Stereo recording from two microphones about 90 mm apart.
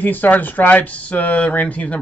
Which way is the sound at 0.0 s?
20° left (ahead or behind).